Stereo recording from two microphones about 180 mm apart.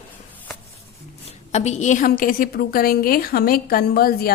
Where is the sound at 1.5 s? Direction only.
40° left (ahead or behind).